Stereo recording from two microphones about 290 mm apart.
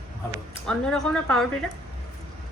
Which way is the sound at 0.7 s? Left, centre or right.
Centre.